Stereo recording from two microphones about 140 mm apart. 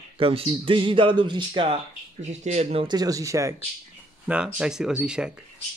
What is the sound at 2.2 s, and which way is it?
Speech, 55° right (ahead or behind).